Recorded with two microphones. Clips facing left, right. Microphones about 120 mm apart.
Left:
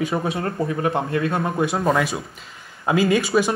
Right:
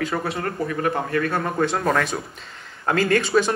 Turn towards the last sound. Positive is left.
turn(degrees=10)  # may be behind; listen again after turning